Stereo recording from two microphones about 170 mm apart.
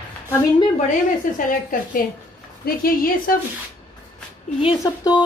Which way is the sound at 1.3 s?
50° left (ahead or behind).